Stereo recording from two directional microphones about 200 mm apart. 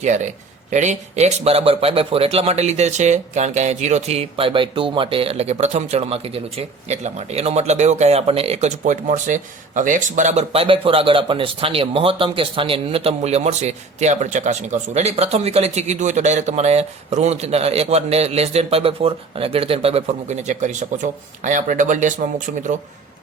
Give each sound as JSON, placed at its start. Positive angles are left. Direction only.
{"t": 0.0, "sound": "speech", "side_deg": -35}